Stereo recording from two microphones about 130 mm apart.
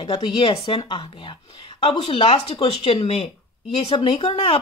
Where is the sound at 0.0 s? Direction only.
35° left (ahead or behind).